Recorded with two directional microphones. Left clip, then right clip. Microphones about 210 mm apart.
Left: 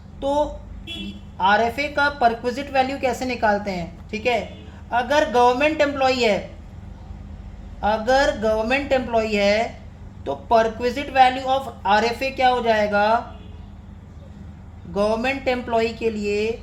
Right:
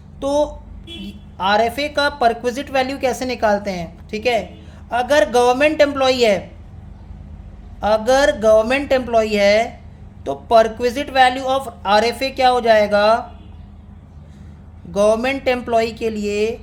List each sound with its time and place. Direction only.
0.2 s a woman's voice: 35° right (ahead or behind)
7.8 s a woman's voice: 35° right (ahead or behind)
14.9 s a woman's voice: 35° right (ahead or behind)